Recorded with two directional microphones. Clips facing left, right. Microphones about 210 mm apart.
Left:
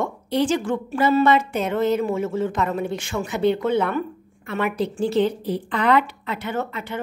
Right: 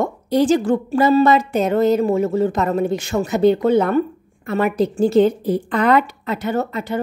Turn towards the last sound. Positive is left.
turn(degrees=-40)  # may be behind; listen again after turning